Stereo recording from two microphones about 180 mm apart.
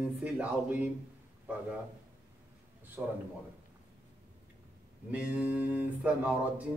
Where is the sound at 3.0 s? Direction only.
10° right (ahead or behind).